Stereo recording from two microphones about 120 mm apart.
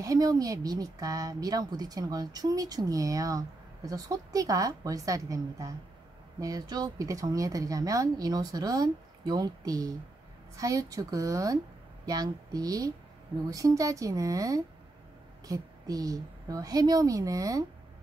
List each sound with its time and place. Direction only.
0.0 s a woman's voice: 30° right (ahead or behind)